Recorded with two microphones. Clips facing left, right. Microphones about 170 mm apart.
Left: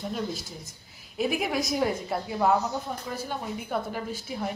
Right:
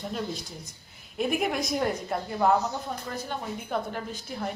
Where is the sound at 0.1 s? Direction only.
5° left (ahead or behind).